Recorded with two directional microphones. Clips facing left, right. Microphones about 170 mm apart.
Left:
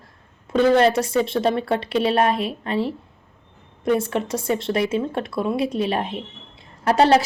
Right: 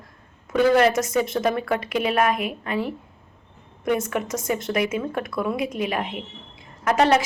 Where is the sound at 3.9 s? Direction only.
30° left (ahead or behind).